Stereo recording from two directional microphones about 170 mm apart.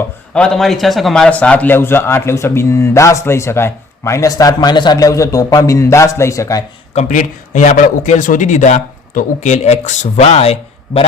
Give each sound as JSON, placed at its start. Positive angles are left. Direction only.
{"t": 0.3, "sound": "a man's voice", "side_deg": 5}
{"t": 6.9, "sound": "a man's voice", "side_deg": 50}